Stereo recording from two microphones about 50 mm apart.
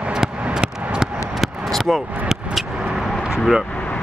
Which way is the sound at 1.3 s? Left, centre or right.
Centre.